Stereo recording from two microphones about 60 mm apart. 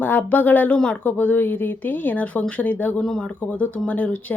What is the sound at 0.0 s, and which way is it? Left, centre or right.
Speech, left.